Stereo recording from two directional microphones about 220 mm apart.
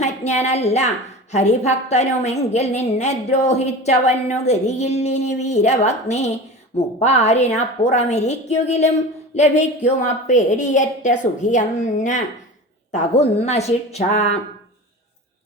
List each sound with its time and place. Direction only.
0.0 s a woman's voice: 30° left (ahead or behind)